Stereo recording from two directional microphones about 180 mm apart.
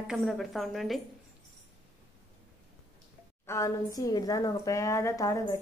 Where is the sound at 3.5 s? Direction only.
20° left (ahead or behind).